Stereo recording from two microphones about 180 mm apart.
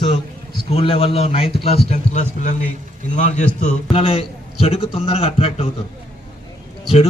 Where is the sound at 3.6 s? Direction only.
30° left (ahead or behind).